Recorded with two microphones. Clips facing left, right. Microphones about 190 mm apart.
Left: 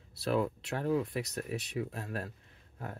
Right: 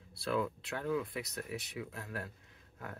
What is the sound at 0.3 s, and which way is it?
Speech, 30° left (ahead or behind).